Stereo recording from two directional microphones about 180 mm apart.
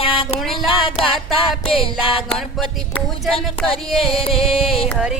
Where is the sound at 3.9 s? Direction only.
30° left (ahead or behind).